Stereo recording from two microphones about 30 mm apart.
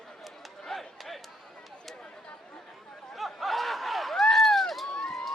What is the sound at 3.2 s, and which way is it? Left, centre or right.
Snicker, centre.